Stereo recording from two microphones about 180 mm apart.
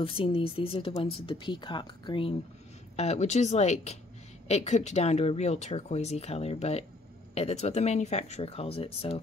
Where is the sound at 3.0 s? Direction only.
40° left (ahead or behind).